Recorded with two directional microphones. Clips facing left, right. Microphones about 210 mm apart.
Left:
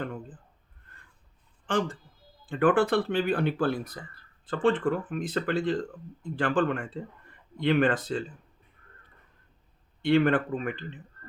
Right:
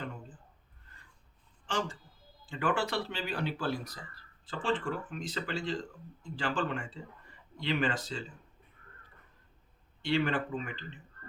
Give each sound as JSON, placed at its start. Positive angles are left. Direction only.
{"t": 0.0, "sound": "a sound", "side_deg": 55}
{"t": 1.6, "sound": "speech", "side_deg": 55}
{"t": 10.0, "sound": "speech", "side_deg": 55}